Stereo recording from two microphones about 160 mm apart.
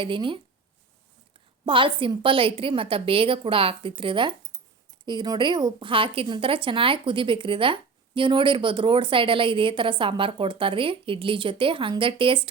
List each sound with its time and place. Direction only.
0.0 s speech: 30° right (ahead or behind)
1.6 s speech: 30° right (ahead or behind)